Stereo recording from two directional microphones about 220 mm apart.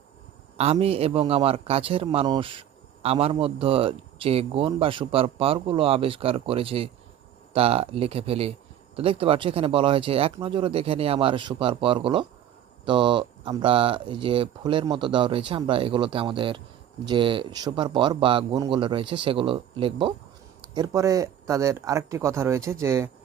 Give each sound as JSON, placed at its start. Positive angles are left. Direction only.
{"t": 0.5, "sound": "a man's voice", "side_deg": -25}